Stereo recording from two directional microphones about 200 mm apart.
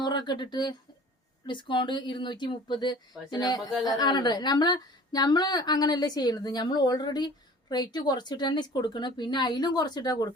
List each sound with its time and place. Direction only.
0.0 s a woman's voice: 20° left (ahead or behind)